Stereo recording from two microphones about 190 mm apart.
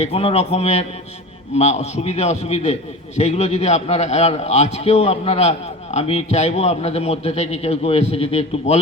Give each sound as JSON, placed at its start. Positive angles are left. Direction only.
{"t": 0.0, "sound": "a man's voice", "side_deg": 30}